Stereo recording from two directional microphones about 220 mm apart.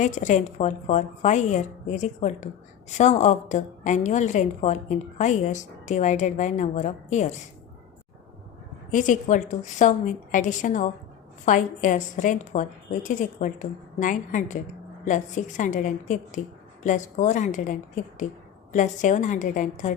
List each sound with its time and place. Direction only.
0.0 s a woman's voice: 35° left (ahead or behind)
8.9 s a woman's voice: 35° left (ahead or behind)